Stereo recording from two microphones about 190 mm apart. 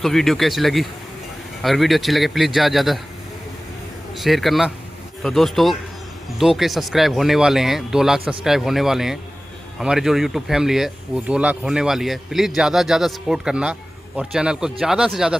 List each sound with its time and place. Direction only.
0.0 s speech: centre (ahead or behind)
4.1 s speech: centre (ahead or behind)